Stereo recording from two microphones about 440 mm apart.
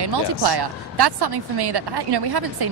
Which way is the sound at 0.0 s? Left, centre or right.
Right.